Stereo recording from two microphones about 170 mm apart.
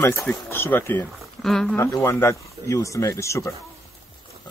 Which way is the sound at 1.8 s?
15° left (ahead or behind).